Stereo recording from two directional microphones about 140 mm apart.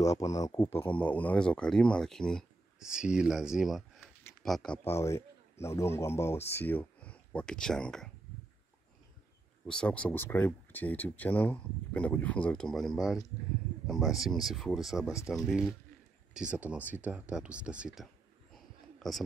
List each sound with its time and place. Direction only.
0.0 s speech: 20° left (ahead or behind); by 2.9 s 5° left (ahead or behind)
2.9 s speech: 5° right (ahead or behind)
4.8 s speech: 20° left (ahead or behind); by 8.1 s 5° left (ahead or behind)
9.7 s speech: 10° left (ahead or behind)
18.5 s a sound: centre (ahead or behind)